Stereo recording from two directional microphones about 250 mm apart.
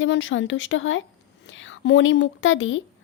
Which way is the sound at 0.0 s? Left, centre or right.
Left.